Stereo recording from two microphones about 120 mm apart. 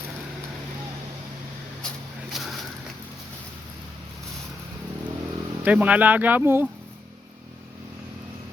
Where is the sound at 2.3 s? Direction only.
Centre (ahead or behind).